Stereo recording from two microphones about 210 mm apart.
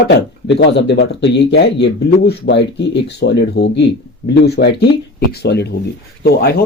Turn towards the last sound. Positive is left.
turn(degrees=50)  # may be behind; listen again after turning